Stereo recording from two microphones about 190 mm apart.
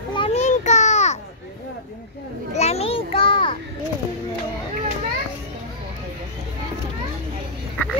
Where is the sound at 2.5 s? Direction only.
35° left (ahead or behind).